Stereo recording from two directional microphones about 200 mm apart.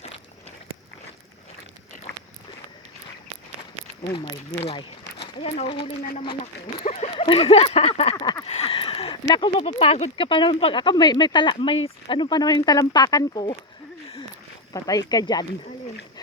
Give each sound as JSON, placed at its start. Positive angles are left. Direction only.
{"t": 4.6, "sound": "speech", "side_deg": 30}
{"t": 6.0, "sound": "speech", "side_deg": 45}
{"t": 6.2, "sound": "speech", "side_deg": 35}
{"t": 8.1, "sound": "speech", "side_deg": 20}
{"t": 8.4, "sound": "speech", "side_deg": 30}
{"t": 14.7, "sound": "speech", "side_deg": 15}